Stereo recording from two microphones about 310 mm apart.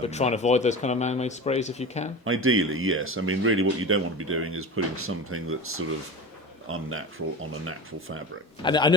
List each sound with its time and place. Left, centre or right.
0.0 s speech: left
2.2 s speech: right
8.6 s speech: centre